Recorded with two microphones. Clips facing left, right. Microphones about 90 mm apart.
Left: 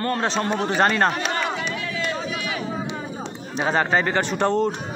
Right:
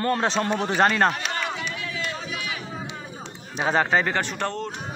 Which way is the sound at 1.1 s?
40° left (ahead or behind).